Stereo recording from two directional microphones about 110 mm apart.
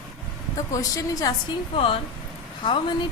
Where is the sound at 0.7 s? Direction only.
30° left (ahead or behind).